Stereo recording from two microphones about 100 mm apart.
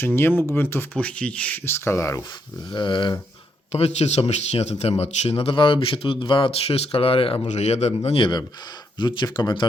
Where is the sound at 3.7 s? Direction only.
90° left; by 8.3 s 65° left (ahead or behind).